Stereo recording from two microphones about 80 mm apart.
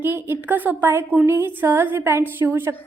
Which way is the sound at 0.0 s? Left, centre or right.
Right.